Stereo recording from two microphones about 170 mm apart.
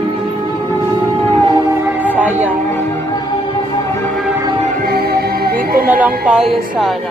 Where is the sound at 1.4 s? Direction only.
20° right (ahead or behind).